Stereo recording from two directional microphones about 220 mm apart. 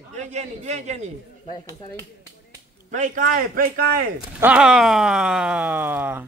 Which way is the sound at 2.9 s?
35° right (ahead or behind).